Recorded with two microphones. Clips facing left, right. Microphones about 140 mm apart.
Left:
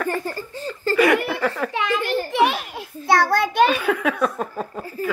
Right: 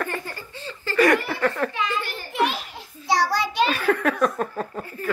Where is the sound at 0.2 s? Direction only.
40° left (ahead or behind).